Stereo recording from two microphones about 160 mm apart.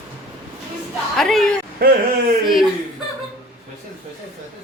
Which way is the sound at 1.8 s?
70° right (ahead or behind).